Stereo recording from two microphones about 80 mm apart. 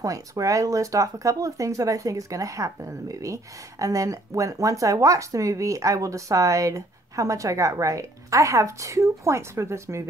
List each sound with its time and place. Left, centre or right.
0.0 s speech: right